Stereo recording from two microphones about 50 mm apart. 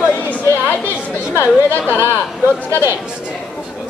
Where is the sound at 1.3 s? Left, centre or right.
Right.